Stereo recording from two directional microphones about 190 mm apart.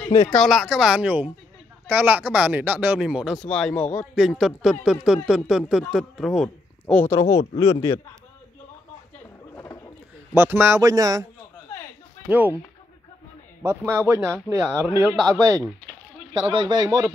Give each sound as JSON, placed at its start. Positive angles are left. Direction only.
{"t": 0.3, "sound": "speech", "side_deg": 0}
{"t": 7.1, "sound": "speech", "side_deg": 15}
{"t": 9.6, "sound": "a sound", "side_deg": 15}
{"t": 10.3, "sound": "speech", "side_deg": -10}
{"t": 12.3, "sound": "speech", "side_deg": -10}
{"t": 13.6, "sound": "speech", "side_deg": -10}
{"t": 16.5, "sound": "speech", "side_deg": -20}